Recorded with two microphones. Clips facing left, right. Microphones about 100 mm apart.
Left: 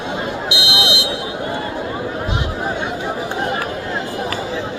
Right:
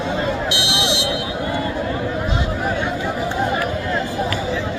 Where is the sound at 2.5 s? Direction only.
20° left (ahead or behind).